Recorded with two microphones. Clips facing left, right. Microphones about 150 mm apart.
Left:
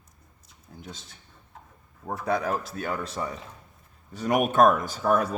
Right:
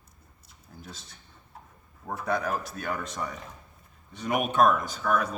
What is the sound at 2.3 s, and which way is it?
Speech, 30° left (ahead or behind).